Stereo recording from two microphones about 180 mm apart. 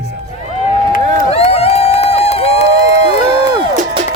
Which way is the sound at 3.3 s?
25° right (ahead or behind).